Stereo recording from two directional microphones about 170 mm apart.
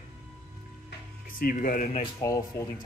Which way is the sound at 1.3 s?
55° left (ahead or behind).